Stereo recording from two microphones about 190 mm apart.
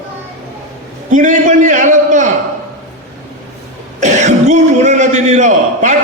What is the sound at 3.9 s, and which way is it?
A man's voice, 40° right (ahead or behind).